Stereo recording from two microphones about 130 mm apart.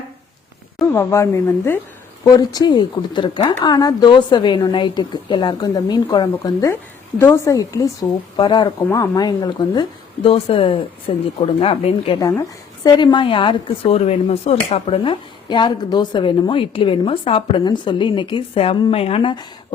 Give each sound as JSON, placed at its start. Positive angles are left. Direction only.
{"t": 0.9, "sound": "a woman's voice", "side_deg": 20}
{"t": 2.2, "sound": "a woman's voice", "side_deg": 30}
{"t": 10.2, "sound": "speech", "side_deg": 45}
{"t": 12.2, "sound": "a woman's voice", "side_deg": 30}